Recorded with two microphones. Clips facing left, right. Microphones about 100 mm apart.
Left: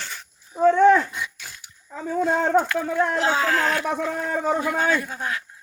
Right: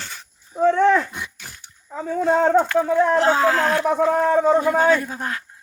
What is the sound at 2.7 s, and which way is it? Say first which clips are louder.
Speech: right 6 dB; 30° right (ahead or behind).